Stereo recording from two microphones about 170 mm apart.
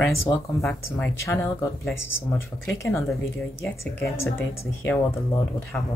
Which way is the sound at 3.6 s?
15° left (ahead or behind).